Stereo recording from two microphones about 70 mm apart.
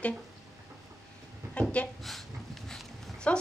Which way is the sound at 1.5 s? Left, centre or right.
Centre.